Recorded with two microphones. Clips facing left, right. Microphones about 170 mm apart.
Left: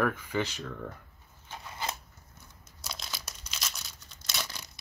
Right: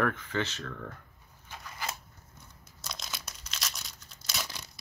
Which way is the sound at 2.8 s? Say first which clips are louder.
Even; 5° left (ahead or behind).